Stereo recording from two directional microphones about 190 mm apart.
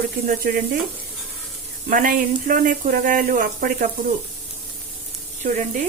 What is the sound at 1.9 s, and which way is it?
Speech, 45° right (ahead or behind).